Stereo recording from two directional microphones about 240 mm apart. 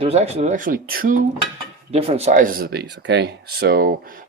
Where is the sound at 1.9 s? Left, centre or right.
Right.